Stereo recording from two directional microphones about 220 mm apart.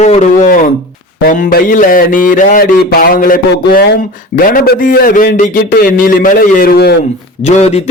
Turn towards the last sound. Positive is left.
turn(degrees=30)  # may be behind; listen again after turning